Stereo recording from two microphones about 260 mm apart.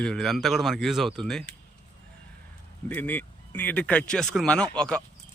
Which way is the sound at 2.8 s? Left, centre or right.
Centre.